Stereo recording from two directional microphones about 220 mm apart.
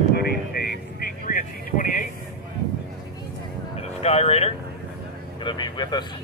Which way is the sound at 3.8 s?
30° left (ahead or behind).